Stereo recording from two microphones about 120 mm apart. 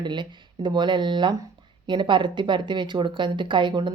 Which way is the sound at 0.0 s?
40° right (ahead or behind).